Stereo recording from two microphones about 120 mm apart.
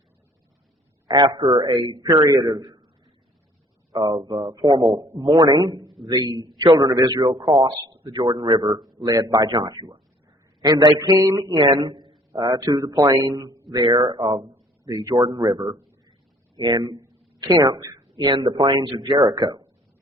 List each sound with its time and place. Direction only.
1.0 s a man's voice: 35° right (ahead or behind)
3.9 s a man's voice: 40° right (ahead or behind)
8.8 s a man's voice: centre (ahead or behind)
9.0 s a man's voice: 30° right (ahead or behind)
12.5 s a man's voice: 25° right (ahead or behind)